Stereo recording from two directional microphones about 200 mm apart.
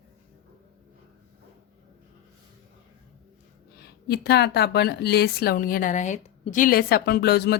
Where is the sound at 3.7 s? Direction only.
55° left (ahead or behind).